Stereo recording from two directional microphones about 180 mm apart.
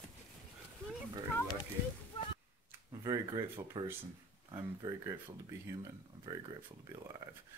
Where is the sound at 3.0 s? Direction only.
20° right (ahead or behind).